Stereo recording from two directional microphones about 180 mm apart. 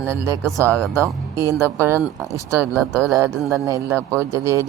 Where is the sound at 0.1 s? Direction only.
15° right (ahead or behind).